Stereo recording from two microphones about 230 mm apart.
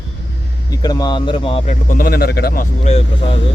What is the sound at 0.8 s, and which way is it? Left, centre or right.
A man's voice, centre.